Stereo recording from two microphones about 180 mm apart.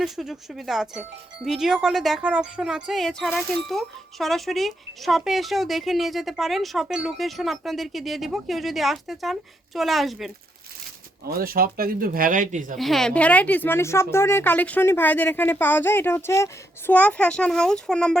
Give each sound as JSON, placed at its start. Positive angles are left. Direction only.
{"t": 0.0, "sound": "speech", "side_deg": 0}
{"t": 11.3, "sound": "speech", "side_deg": -55}
{"t": 12.8, "sound": "a woman's voice", "side_deg": 0}